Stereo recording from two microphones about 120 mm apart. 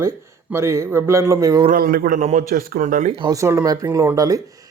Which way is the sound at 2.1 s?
80° right.